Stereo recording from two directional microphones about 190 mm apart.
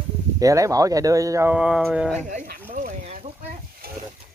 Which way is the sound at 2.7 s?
45° right (ahead or behind).